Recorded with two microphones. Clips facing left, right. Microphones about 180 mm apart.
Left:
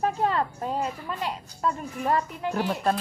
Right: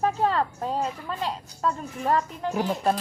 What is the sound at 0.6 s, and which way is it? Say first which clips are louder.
A woman's voice: right 1 dB; 10° left (ahead or behind).